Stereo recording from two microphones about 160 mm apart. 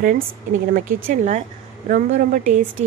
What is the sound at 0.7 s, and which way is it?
A woman's voice, 65° right (ahead or behind).